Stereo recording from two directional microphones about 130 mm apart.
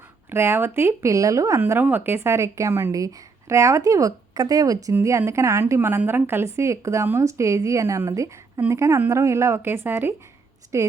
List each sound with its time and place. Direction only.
0.3 s speech: 15° right (ahead or behind)